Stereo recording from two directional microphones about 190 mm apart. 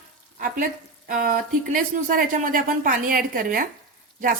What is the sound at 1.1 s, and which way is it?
A woman's voice, 45° right (ahead or behind).